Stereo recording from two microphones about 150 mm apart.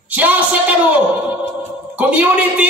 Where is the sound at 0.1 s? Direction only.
10° right (ahead or behind).